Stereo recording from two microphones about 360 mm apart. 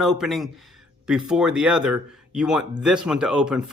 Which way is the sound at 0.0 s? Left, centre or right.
Centre.